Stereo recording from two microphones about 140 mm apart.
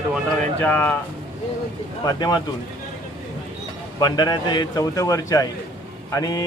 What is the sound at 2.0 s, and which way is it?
Speech, 30° left (ahead or behind).